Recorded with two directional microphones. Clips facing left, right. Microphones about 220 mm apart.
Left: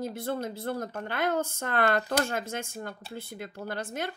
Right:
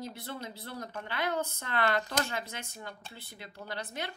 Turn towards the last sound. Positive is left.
turn(degrees=45)  # may be behind; listen again after turning